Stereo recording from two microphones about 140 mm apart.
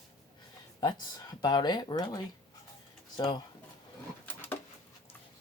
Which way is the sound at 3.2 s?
30° left (ahead or behind).